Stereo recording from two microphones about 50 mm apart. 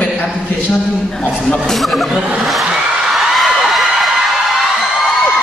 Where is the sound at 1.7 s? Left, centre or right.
Centre.